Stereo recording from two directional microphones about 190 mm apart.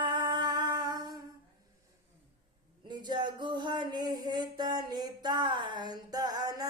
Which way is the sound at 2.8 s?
20° right (ahead or behind).